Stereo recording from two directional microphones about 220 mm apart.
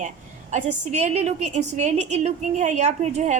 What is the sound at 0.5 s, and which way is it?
A woman's voice, 30° right (ahead or behind).